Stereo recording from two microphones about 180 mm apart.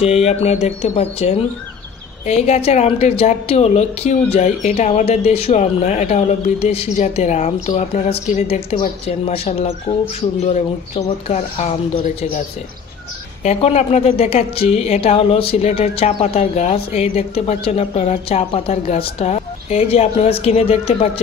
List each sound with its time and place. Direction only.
0.0 s a woman's voice: 35° left (ahead or behind)
13.4 s a woman's voice: 35° left (ahead or behind)